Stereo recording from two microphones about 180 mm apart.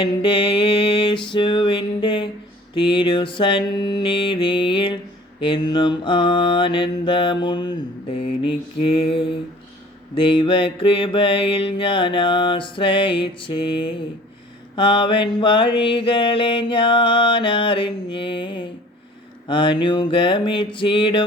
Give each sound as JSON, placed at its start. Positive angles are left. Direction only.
{"t": 0.0, "sound": "mantra", "side_deg": 30}